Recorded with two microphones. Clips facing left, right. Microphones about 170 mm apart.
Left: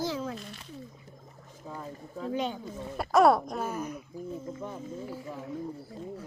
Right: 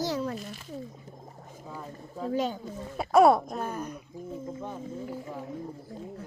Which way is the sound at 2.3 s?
40° right (ahead or behind).